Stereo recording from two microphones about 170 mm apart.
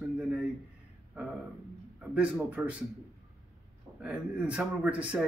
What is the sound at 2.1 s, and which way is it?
Speech, 10° right (ahead or behind).